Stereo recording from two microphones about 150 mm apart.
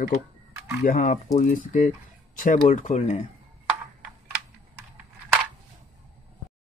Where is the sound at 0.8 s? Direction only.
65° left (ahead or behind).